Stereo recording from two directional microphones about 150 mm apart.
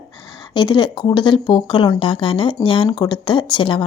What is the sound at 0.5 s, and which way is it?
A woman's voice, 30° left (ahead or behind).